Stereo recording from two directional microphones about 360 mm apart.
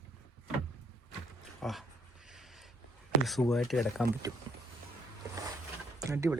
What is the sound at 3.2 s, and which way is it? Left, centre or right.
Speech, centre.